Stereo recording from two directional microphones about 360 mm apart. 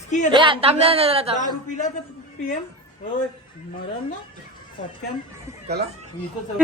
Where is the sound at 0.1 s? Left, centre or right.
Centre.